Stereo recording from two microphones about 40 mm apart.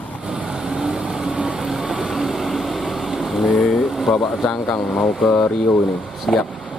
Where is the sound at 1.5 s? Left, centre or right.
Centre.